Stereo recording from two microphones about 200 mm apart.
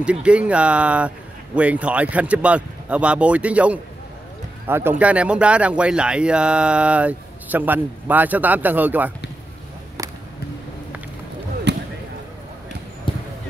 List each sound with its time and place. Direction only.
0.0 s speech: 5° right (ahead or behind)
11.7 s basketball bounce: 60° right (ahead or behind)
13.1 s a sound: 25° left (ahead or behind)